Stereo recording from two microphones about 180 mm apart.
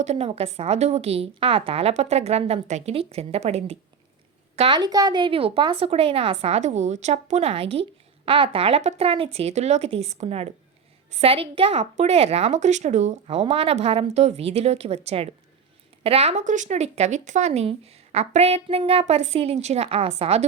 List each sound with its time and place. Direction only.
0.0 s speech: 35° right (ahead or behind)